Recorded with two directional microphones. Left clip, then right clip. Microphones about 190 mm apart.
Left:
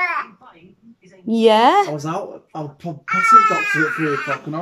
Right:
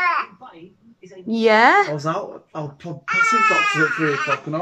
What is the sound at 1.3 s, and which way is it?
A woman's voice, 15° left (ahead or behind).